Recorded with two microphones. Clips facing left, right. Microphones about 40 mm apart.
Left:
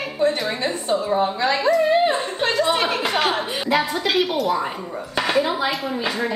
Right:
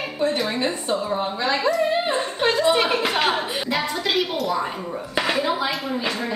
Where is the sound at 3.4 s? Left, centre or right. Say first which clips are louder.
Left 3 dB; centre.